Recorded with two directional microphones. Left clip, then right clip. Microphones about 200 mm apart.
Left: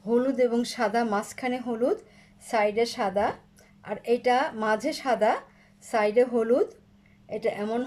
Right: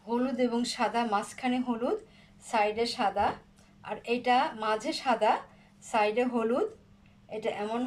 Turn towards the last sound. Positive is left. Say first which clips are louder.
# left 4 dB
turn(degrees=25)  # may be behind; listen again after turning